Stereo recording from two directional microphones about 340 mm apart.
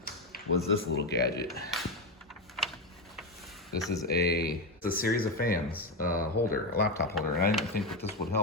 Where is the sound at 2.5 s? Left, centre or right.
Centre.